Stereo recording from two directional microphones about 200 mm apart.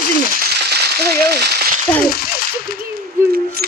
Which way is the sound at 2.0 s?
50° left (ahead or behind).